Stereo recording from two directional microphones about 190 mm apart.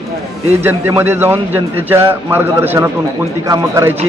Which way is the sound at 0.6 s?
10° right (ahead or behind).